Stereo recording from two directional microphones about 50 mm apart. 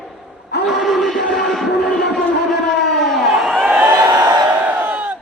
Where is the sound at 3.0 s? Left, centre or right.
Centre.